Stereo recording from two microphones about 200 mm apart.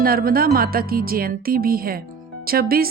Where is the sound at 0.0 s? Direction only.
45° right (ahead or behind).